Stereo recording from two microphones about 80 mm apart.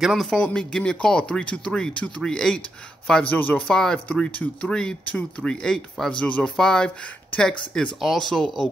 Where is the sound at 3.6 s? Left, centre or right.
Centre.